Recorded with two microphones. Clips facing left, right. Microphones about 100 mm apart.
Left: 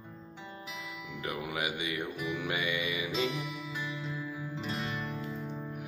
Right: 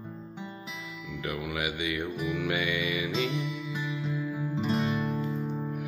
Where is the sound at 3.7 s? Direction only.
10° right (ahead or behind).